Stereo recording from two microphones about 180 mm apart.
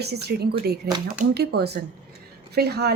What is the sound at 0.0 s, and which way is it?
A woman's voice, 65° right (ahead or behind).